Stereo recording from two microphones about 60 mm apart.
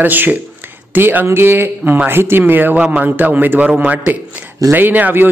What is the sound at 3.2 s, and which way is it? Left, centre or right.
A man's voice, right.